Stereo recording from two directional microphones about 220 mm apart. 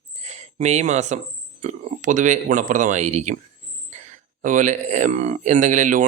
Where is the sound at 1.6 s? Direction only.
35° right (ahead or behind).